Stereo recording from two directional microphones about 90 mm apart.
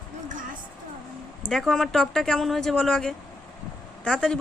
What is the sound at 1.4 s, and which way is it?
Speech, centre (ahead or behind).